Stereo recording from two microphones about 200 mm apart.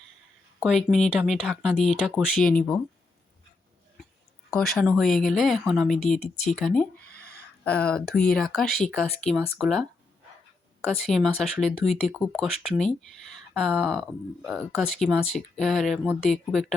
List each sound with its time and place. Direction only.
0.6 s speech: centre (ahead or behind)
4.5 s speech: 5° left (ahead or behind)
7.1 s a sound: 50° left (ahead or behind)
7.6 s speech: 5° left (ahead or behind)
11.0 s speech: centre (ahead or behind)